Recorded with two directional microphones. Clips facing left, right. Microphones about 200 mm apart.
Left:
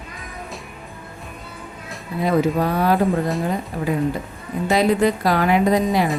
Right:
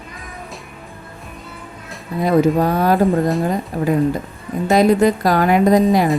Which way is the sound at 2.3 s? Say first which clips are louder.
Right 4 dB; 45° right (ahead or behind).